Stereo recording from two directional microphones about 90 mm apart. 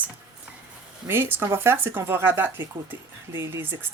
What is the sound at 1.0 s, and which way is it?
Speech, 25° right (ahead or behind).